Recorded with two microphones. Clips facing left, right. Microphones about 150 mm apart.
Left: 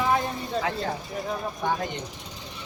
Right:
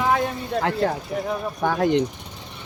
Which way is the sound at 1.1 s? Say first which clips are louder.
Right 6 dB; 90° right.